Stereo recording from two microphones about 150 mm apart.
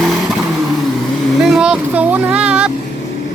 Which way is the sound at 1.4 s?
5° right (ahead or behind).